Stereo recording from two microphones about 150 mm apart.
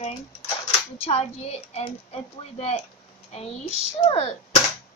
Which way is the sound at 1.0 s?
45° left (ahead or behind).